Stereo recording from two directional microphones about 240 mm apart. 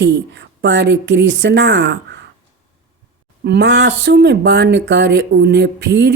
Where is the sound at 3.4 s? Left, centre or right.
Right.